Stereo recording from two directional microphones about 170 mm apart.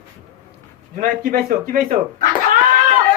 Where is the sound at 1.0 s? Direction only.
55° right (ahead or behind).